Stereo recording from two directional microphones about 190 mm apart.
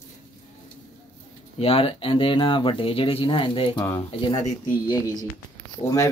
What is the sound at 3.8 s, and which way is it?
Speech, 15° left (ahead or behind).